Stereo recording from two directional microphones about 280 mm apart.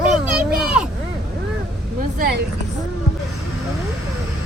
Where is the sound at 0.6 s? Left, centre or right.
Centre.